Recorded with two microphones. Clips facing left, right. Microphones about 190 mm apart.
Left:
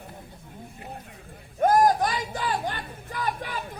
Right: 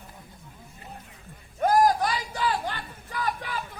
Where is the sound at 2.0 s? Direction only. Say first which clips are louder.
Even; 45° left (ahead or behind).